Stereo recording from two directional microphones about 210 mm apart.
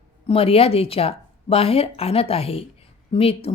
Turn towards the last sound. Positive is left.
turn(degrees=25)  # may be behind; listen again after turning